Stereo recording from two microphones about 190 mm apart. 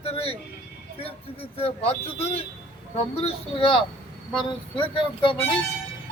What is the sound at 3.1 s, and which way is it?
Speech, 30° left (ahead or behind).